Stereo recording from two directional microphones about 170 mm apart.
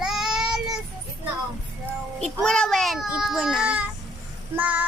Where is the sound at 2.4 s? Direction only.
5° left (ahead or behind).